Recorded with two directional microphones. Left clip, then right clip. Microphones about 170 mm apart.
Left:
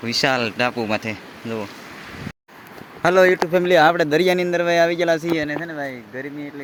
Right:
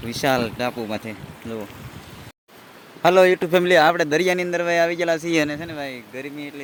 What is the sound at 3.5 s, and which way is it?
Speech, 15° right (ahead or behind).